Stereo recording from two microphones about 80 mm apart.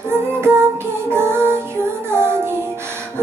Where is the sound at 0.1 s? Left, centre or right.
Right.